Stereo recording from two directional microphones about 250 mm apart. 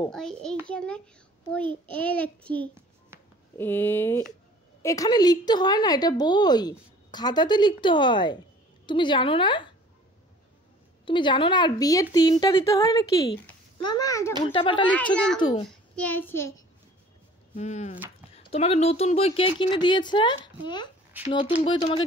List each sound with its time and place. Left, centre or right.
0.1 s a child's voice: centre
11.1 s a woman's voice: centre
16.0 s a woman's voice: centre
17.6 s a woman's voice: left